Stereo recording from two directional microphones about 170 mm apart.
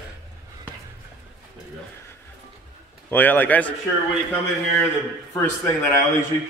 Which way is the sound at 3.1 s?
10° left (ahead or behind).